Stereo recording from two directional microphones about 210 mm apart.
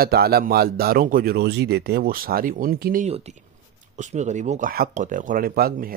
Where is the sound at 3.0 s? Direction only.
30° right (ahead or behind).